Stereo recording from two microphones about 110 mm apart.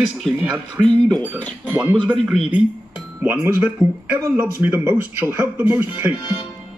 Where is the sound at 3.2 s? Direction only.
20° right (ahead or behind).